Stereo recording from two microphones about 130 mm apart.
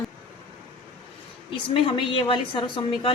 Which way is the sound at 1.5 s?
40° left (ahead or behind).